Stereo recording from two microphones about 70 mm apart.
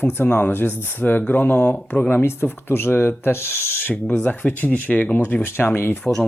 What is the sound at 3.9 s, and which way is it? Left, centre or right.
Speech, left.